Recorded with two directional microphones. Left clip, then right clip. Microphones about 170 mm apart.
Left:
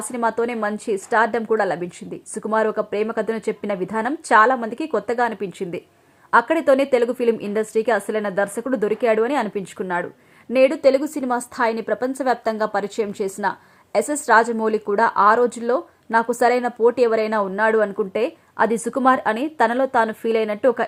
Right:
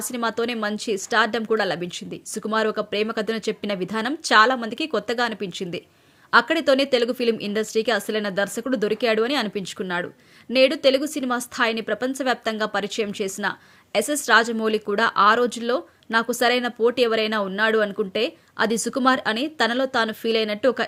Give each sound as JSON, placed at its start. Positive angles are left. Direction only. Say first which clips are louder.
{"t": 0.1, "sound": "speech", "louder": "left 4 dB", "side_deg": -15}
{"t": 4.4, "sound": "a woman's voice", "louder": "left 2 dB", "side_deg": -30}
{"t": 4.6, "sound": "speech", "louder": "left 2 dB", "side_deg": -15}
{"t": 8.3, "sound": "speech", "louder": "left 3 dB", "side_deg": -30}